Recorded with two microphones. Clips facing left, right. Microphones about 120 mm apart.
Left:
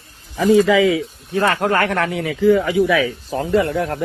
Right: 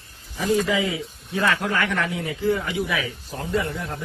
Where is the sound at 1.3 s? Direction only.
45° left (ahead or behind); by 4.0 s 70° left (ahead or behind).